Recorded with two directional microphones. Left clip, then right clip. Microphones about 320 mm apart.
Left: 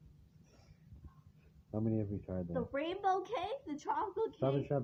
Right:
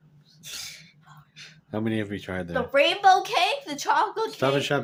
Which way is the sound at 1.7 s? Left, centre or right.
Right.